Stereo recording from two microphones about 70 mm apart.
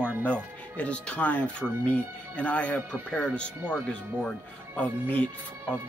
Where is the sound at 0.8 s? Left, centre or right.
Centre.